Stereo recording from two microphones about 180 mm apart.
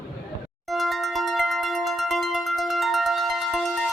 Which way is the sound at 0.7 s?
Centre (ahead or behind).